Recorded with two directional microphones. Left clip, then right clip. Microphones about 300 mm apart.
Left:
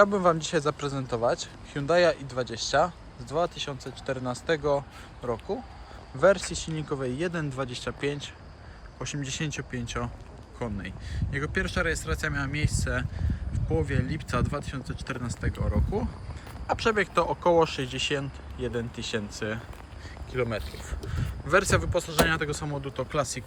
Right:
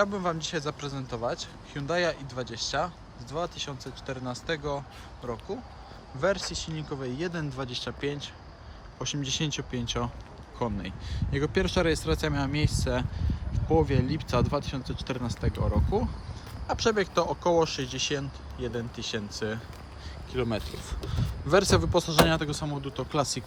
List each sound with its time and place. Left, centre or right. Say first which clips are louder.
0.0 s a man's voice: left 6 dB; centre